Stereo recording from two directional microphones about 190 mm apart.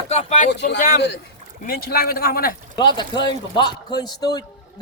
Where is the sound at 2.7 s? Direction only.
25° left (ahead or behind).